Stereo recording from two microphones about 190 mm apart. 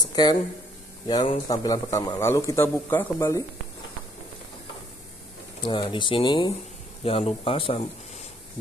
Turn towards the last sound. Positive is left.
turn(degrees=30)  # may be behind; listen again after turning